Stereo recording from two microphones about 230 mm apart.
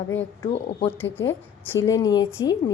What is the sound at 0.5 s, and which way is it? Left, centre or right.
Speech, left.